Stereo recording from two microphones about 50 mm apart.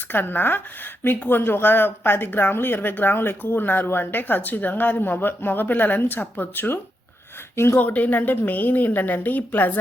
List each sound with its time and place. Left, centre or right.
0.1 s speech: left
7.5 s speech: left
7.8 s speech: left